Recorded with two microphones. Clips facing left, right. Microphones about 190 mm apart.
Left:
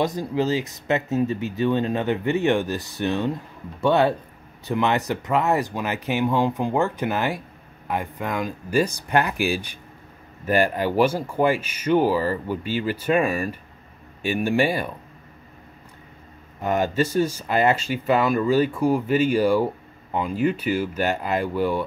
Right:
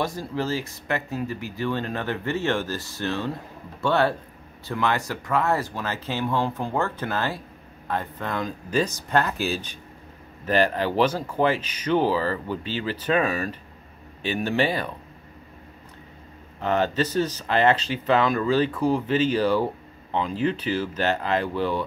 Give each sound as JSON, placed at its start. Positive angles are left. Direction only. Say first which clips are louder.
{"t": 0.0, "sound": "speech", "louder": "left 4 dB", "side_deg": 20}
{"t": 16.6, "sound": "speech", "louder": "left 1 dB", "side_deg": 10}